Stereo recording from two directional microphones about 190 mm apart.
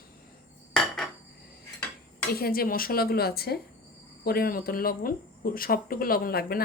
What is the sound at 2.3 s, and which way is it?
Speech, 50° left (ahead or behind).